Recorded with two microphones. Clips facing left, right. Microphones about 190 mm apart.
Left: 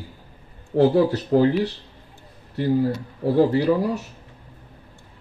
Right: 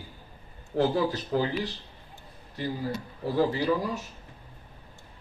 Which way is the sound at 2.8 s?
30° left (ahead or behind).